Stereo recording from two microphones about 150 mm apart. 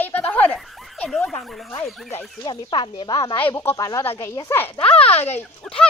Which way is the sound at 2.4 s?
30° left (ahead or behind).